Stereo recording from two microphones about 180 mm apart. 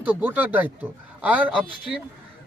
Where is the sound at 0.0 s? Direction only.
10° right (ahead or behind).